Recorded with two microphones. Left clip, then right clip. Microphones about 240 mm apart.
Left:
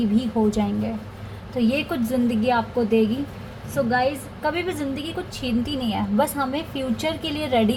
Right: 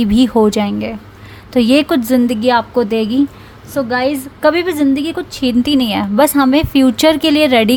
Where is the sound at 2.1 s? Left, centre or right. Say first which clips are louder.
Right 7 dB; right.